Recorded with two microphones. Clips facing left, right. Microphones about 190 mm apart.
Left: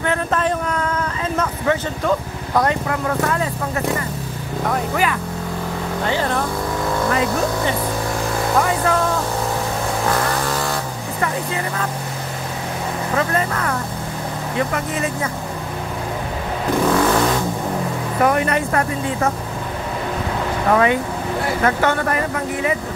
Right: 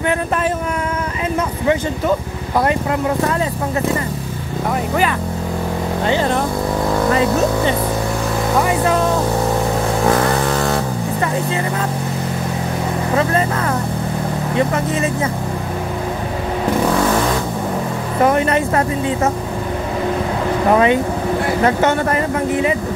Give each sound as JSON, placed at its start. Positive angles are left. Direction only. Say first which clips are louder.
{"t": 1.7, "sound": "speech", "louder": "right 3 dB", "side_deg": -10}
{"t": 6.0, "sound": "speech", "louder": "right 4 dB", "side_deg": -20}
{"t": 18.2, "sound": "speech", "louder": "right 3 dB", "side_deg": -25}
{"t": 20.7, "sound": "speech", "louder": "right 2 dB", "side_deg": -25}